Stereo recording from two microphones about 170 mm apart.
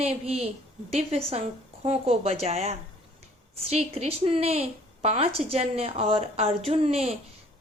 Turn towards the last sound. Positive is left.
turn(degrees=-35)  # may be behind; listen again after turning